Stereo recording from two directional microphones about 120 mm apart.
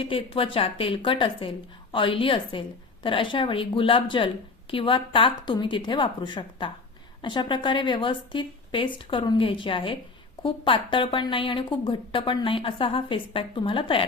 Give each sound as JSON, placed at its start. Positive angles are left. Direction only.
{"t": 0.0, "sound": "speech", "side_deg": 50}